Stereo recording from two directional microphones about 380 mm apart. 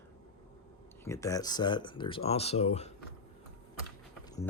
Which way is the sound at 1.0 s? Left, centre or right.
Centre.